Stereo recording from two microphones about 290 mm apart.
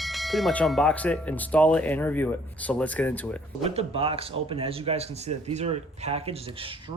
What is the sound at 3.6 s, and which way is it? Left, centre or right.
Speech, centre.